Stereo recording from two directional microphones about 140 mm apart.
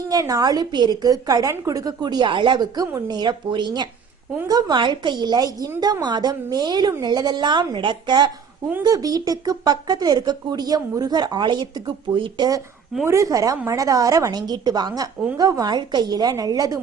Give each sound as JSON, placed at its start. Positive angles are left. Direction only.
{"t": 0.1, "sound": "a woman's voice", "side_deg": -25}